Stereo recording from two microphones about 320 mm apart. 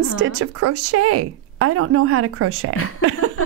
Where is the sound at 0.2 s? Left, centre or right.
Right.